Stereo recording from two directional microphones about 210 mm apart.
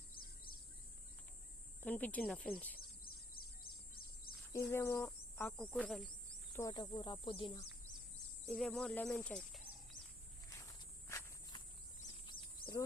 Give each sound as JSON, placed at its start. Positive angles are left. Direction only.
{"t": 1.8, "sound": "speech", "side_deg": 5}
{"t": 4.5, "sound": "speech", "side_deg": 15}
{"t": 6.6, "sound": "speech", "side_deg": 20}
{"t": 8.4, "sound": "speech", "side_deg": 5}
{"t": 10.6, "sound": "walk", "side_deg": 15}
{"t": 12.2, "sound": "a sound", "side_deg": 20}